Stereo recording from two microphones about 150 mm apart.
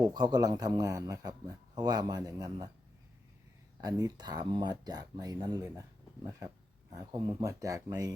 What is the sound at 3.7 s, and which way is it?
A man's voice, 25° right (ahead or behind).